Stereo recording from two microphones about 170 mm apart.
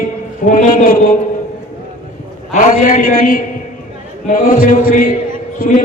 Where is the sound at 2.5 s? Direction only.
50° left (ahead or behind).